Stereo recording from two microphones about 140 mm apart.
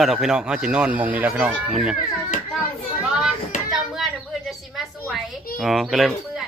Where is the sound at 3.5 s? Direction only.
60° left (ahead or behind).